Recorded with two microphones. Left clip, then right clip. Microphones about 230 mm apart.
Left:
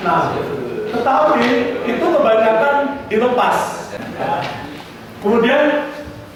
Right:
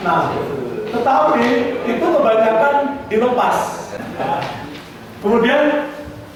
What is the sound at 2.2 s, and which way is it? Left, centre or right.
Speech, centre.